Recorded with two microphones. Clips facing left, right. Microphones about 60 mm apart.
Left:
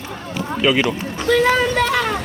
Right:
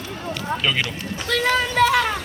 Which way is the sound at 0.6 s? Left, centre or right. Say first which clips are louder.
Left 11 dB; centre.